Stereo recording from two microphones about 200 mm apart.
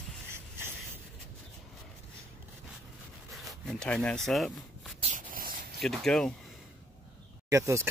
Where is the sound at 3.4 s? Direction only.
Centre (ahead or behind).